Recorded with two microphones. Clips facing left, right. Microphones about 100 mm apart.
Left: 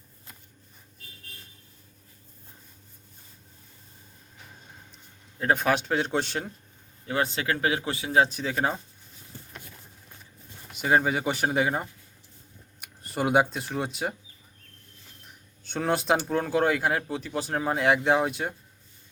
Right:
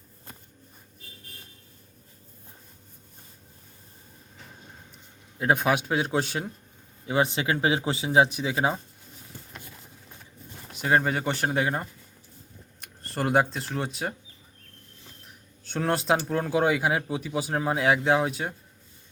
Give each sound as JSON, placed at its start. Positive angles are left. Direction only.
{"t": 5.4, "sound": "speech", "side_deg": -10}
{"t": 7.0, "sound": "speech", "side_deg": -20}
{"t": 10.7, "sound": "speech", "side_deg": 0}
{"t": 15.6, "sound": "speech", "side_deg": 0}